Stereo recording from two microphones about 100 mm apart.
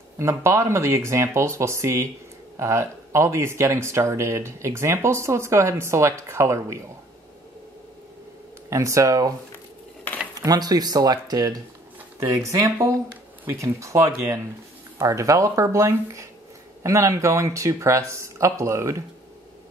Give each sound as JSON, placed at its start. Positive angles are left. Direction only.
{"t": 0.2, "sound": "speech", "side_deg": -25}
{"t": 8.6, "sound": "speech", "side_deg": -30}
{"t": 10.3, "sound": "speech", "side_deg": -40}